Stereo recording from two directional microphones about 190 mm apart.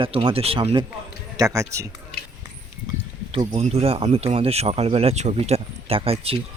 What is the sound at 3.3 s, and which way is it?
Speech, 30° right (ahead or behind).